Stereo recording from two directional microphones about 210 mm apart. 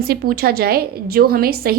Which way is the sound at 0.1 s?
45° right (ahead or behind).